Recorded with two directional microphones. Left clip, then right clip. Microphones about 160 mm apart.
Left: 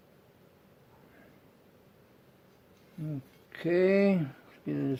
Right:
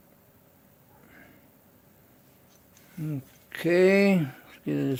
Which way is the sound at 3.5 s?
55° right (ahead or behind).